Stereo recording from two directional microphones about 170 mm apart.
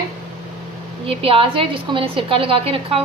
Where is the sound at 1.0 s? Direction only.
35° right (ahead or behind).